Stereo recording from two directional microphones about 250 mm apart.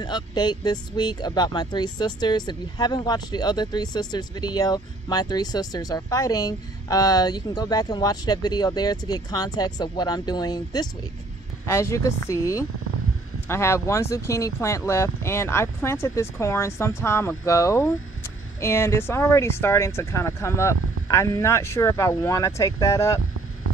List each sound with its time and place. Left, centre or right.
0.0 s speech: centre